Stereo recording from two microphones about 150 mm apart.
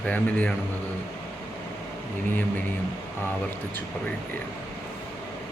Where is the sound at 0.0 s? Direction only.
10° left (ahead or behind).